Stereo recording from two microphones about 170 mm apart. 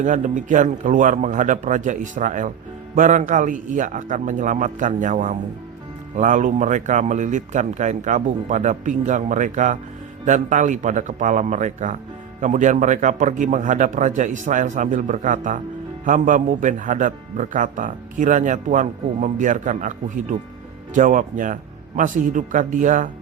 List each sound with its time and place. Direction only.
0.0 s a man's voice: 50° right (ahead or behind)